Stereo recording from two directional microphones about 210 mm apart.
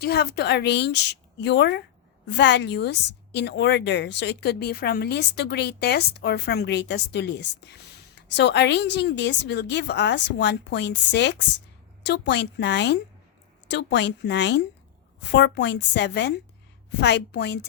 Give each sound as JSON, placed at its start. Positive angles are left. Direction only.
{"t": 0.0, "sound": "a woman's voice", "side_deg": 50}